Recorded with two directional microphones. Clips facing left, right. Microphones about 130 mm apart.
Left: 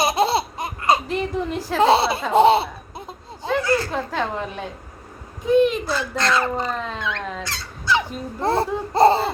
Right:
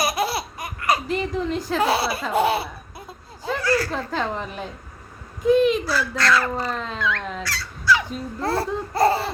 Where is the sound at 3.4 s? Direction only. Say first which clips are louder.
Left 2 dB; 25° left (ahead or behind).